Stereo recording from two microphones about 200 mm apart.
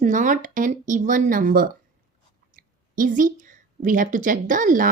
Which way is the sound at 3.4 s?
40° right (ahead or behind).